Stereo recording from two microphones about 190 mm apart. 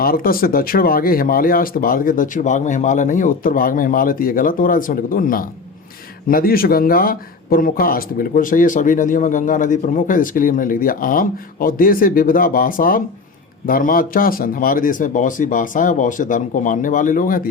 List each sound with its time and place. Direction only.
0.0 s speech: 50° left (ahead or behind)